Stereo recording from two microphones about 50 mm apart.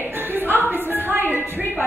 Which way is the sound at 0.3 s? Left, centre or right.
Right.